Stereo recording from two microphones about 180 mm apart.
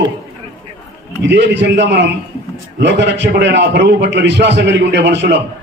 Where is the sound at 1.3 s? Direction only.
80° right.